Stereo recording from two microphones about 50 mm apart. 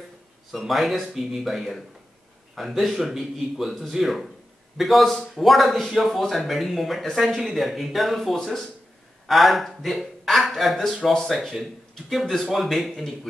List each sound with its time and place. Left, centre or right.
0.5 s speech: centre